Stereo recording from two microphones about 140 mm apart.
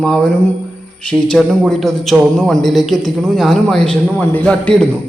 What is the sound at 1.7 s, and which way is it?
Speech, centre (ahead or behind).